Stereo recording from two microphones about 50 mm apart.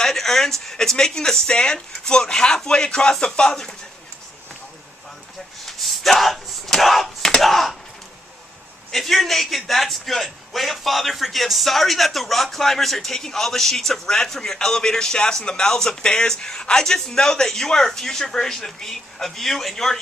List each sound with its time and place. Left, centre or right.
0.0 s a man's voice: centre
5.6 s a sound: centre
8.9 s a man's voice: centre